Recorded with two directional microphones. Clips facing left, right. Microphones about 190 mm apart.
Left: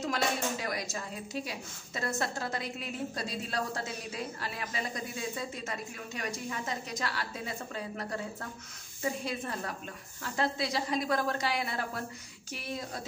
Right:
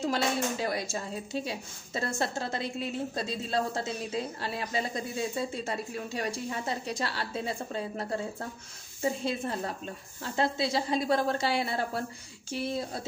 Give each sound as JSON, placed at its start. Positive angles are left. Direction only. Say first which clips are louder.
{"t": 0.0, "sound": "speech", "louder": "right 3 dB", "side_deg": -30}